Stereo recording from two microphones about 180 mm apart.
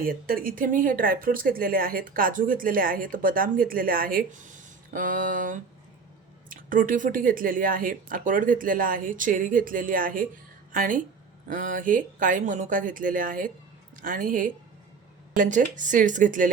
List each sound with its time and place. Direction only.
0.0 s a woman's voice: 55° right (ahead or behind)